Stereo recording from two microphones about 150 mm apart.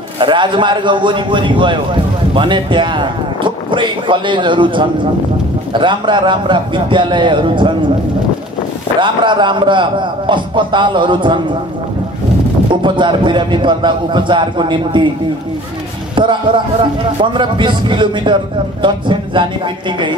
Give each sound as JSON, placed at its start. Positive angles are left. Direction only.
{"t": 0.2, "sound": "a man's voice", "side_deg": -30}
{"t": 9.0, "sound": "a man's voice", "side_deg": -30}
{"t": 12.8, "sound": "a man's voice", "side_deg": -30}
{"t": 16.2, "sound": "a man's voice", "side_deg": -30}